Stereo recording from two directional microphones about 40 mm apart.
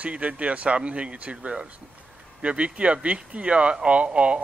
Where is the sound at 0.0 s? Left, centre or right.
Right.